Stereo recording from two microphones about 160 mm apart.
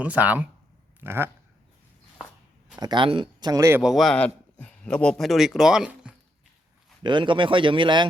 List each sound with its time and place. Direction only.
0.0 s speech: 10° right (ahead or behind)
2.7 s speech: 25° right (ahead or behind)
3.8 s speech: centre (ahead or behind)
7.0 s speech: 30° right (ahead or behind)